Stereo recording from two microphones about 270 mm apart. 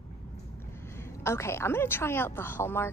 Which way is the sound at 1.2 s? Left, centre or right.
Centre.